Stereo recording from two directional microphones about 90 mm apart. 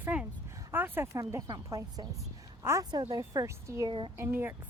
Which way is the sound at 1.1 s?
35° right (ahead or behind).